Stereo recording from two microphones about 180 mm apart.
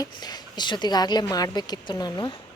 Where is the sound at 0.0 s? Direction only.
20° left (ahead or behind).